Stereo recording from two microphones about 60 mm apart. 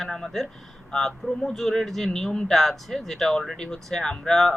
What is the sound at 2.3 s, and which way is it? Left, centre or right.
Speech, centre.